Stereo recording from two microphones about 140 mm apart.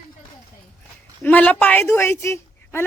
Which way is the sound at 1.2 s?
10° left (ahead or behind).